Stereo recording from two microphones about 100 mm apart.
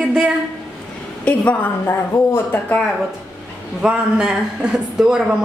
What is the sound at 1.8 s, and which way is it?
Speech, 25° left (ahead or behind).